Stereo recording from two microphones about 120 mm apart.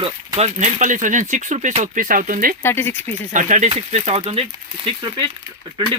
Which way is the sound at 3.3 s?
90° right.